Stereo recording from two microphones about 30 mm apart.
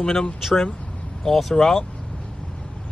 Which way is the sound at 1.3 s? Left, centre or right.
Centre.